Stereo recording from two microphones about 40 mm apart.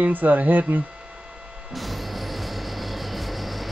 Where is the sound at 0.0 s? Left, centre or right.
Right.